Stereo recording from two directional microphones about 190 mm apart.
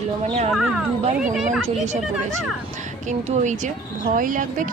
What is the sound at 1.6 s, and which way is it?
Speech, 35° right (ahead or behind).